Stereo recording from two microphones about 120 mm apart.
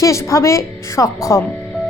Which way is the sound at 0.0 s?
25° left (ahead or behind).